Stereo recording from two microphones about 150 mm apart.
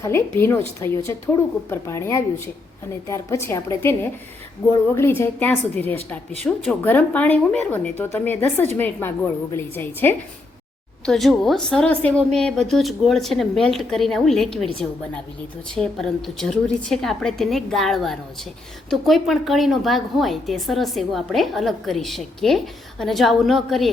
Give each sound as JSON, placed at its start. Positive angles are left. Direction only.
{"t": 0.0, "sound": "a woman's voice", "side_deg": 15}
{"t": 11.0, "sound": "a woman's voice", "side_deg": 0}
{"t": 15.7, "sound": "a woman's voice", "side_deg": 5}